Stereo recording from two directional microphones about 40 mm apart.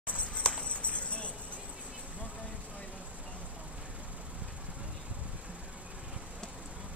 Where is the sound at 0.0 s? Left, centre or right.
Left.